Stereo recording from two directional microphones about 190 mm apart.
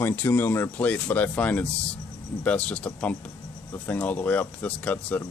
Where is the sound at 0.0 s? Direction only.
10° left (ahead or behind).